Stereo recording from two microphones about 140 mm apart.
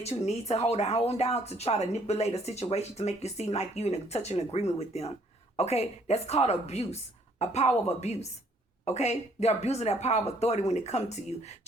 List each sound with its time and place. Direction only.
0.0 s speech: 50° left (ahead or behind)